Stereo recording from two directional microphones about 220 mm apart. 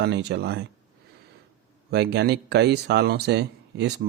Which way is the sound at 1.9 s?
50° right (ahead or behind).